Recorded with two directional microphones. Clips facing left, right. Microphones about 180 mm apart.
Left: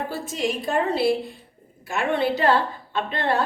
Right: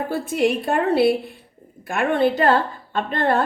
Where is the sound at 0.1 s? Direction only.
55° right (ahead or behind).